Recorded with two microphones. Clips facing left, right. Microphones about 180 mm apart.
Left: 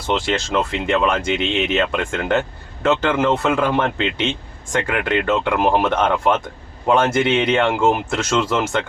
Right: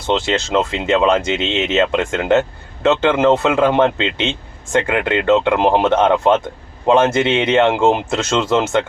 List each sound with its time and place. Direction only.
0.1 s a man's voice: 25° right (ahead or behind)